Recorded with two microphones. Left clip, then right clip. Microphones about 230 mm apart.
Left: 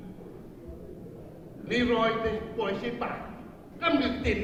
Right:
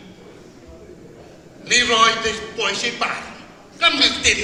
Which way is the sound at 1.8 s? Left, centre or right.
Centre.